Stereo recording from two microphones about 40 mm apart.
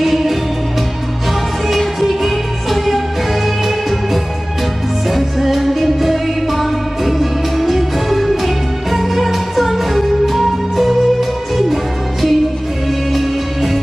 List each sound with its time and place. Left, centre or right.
0.0 s music: centre
1.7 s music: centre